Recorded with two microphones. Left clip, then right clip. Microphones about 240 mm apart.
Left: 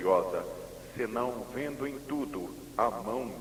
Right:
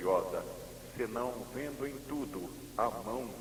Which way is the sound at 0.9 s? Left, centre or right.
Right.